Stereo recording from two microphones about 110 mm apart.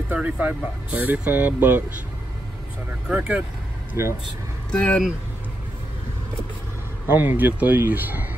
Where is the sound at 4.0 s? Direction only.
25° right (ahead or behind).